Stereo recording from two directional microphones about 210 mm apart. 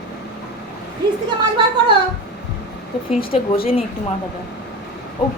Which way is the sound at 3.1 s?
25° left (ahead or behind).